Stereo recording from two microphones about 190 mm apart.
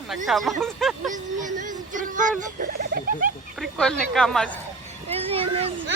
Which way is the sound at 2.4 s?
50° right (ahead or behind).